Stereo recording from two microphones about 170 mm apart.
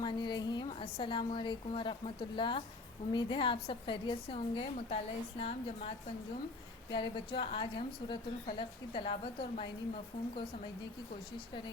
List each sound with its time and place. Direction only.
0.0 s a woman's voice: 25° left (ahead or behind)
6.9 s a woman's voice: 30° left (ahead or behind)